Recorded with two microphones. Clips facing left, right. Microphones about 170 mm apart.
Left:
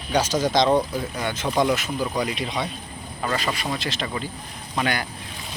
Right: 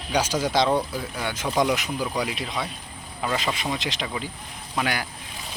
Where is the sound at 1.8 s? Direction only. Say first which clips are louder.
Left 1 dB; 15° right (ahead or behind).